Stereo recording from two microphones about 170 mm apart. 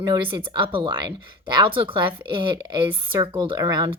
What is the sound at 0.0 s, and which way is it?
A woman's voice, 25° right (ahead or behind).